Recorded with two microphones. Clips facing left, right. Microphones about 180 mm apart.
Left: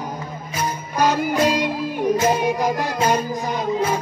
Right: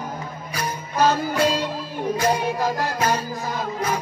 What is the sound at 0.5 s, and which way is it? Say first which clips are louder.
Music: left 1 dB; 15° left (ahead or behind).